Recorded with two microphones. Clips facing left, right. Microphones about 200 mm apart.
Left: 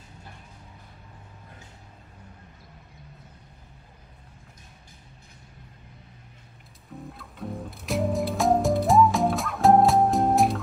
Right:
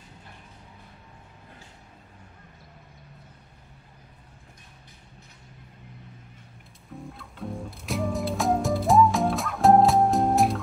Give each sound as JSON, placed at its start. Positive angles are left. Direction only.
{"t": 6.9, "sound": "music", "side_deg": 0}